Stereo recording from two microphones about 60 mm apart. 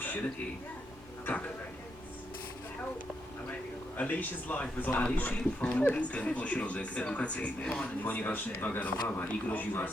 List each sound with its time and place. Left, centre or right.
3.9 s speech: left
8.0 s speech: left